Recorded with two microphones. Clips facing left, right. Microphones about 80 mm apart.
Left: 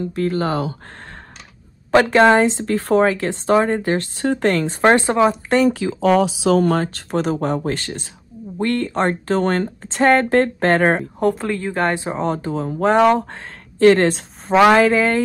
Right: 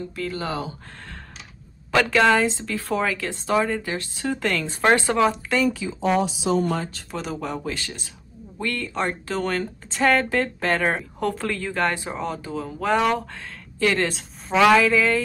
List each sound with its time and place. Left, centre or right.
0.1 s speech: left
1.9 s speech: left
5.7 s speech: left
11.1 s speech: left